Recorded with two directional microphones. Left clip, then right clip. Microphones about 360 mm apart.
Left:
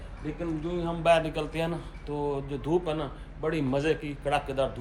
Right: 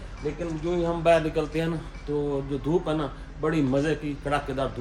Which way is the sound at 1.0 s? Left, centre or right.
Centre.